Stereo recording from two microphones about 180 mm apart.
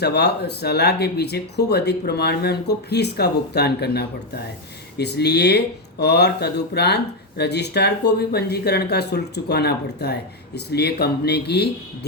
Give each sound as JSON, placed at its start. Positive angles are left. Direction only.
{"t": 0.0, "sound": "speech", "side_deg": 65}